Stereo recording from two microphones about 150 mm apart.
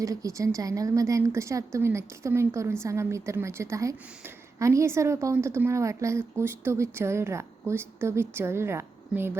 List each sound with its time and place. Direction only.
0.0 s a woman's voice: 20° right (ahead or behind)